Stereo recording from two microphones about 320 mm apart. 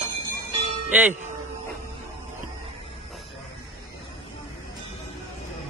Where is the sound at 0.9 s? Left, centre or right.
Centre.